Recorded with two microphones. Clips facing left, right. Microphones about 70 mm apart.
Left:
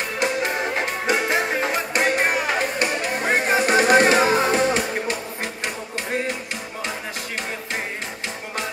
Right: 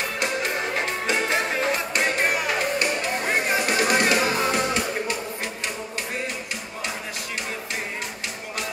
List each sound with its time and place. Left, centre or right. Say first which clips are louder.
0.2 s music: left 5 dB; left